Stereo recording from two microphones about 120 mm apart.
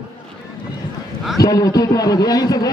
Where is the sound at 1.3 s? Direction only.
30° left (ahead or behind).